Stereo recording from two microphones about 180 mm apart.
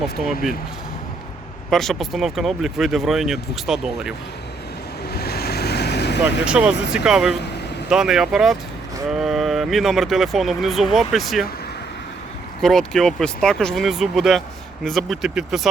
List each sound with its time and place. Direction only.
0.0 s speech: centre (ahead or behind)
1.7 s speech: centre (ahead or behind)
5.1 s vehicle: 60° left (ahead or behind)
6.4 s speech: 5° right (ahead or behind)
12.6 s speech: centre (ahead or behind)